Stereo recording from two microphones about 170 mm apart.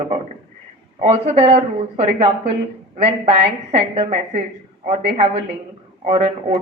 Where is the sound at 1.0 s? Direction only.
35° right (ahead or behind).